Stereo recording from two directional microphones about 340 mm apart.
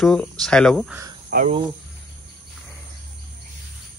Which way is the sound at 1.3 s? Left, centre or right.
Right.